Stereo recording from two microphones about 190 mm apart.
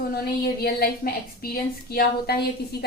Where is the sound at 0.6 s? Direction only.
55° left (ahead or behind).